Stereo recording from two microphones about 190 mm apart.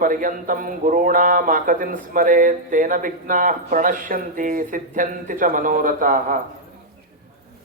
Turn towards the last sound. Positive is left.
turn(degrees=-45)  # may be behind; listen again after turning